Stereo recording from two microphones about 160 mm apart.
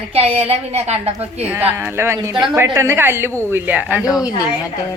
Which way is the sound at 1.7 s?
15° right (ahead or behind).